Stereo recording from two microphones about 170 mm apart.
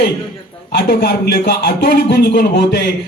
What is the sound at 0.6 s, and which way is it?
Speech, 65° left (ahead or behind).